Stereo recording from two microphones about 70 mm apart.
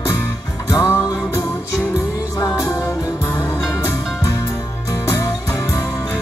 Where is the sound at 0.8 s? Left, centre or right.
Left.